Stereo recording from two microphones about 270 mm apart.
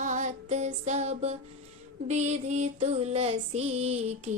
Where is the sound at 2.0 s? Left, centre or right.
Right.